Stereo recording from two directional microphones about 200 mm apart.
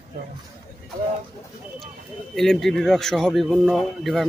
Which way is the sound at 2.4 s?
Centre (ahead or behind).